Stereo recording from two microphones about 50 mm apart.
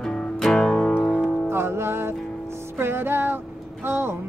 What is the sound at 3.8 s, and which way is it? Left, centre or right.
Vehicle, right.